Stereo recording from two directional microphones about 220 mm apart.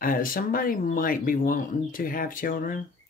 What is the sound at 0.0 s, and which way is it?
Speech, 40° left (ahead or behind).